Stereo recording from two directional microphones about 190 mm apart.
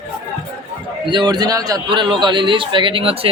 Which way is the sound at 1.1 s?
25° right (ahead or behind).